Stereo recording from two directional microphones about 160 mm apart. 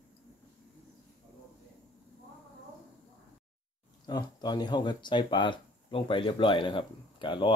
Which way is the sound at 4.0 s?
25° left (ahead or behind).